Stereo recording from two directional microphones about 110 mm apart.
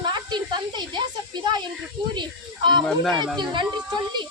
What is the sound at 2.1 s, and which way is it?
A child's voice, 45° right (ahead or behind).